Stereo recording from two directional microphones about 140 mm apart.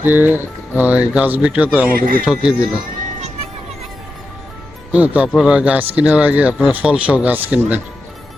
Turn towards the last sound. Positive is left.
turn(degrees=-10)  # may be behind; listen again after turning